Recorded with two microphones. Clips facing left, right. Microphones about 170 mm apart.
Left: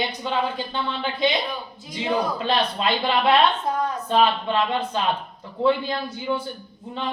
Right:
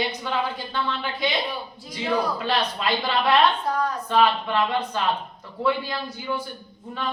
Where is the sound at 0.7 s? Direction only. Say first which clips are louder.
Left 1 dB; 20° left (ahead or behind).